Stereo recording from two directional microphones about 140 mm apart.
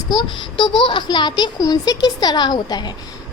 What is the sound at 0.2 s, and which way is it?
A woman's voice, 30° left (ahead or behind).